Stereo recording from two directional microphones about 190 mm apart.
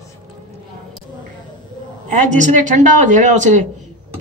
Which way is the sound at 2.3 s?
40° right (ahead or behind).